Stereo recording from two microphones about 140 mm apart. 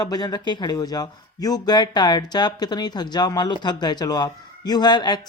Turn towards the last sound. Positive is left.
turn(degrees=30)  # may be behind; listen again after turning